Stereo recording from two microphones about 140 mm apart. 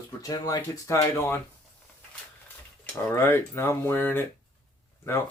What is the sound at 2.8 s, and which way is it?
Speech, 15° left (ahead or behind).